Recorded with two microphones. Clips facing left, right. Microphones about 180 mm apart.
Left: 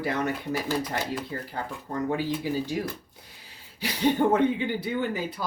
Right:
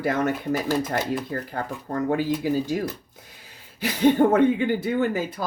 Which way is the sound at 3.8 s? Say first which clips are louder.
Right 5 dB; 50° right (ahead or behind).